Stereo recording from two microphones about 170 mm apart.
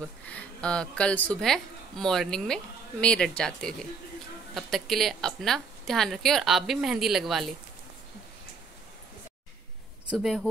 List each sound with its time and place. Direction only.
0.2 s a woman's voice: 10° left (ahead or behind)
10.0 s speech: 5° right (ahead or behind)